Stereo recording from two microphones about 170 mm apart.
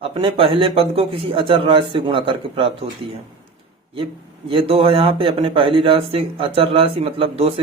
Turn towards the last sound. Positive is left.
turn(degrees=-35)  # may be behind; listen again after turning